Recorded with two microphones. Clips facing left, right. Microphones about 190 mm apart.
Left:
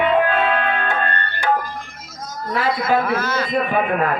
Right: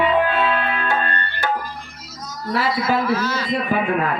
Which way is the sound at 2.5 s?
50° left (ahead or behind).